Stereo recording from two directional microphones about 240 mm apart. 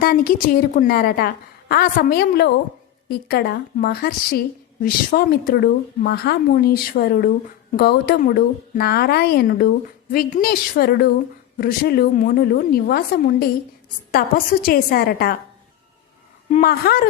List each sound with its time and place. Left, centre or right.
0.0 s a woman's voice: left
16.5 s a woman's voice: left